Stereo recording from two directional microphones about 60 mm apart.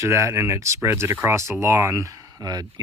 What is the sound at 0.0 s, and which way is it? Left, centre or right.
Speech, right.